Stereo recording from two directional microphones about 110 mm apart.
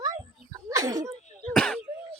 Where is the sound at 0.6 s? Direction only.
35° right (ahead or behind).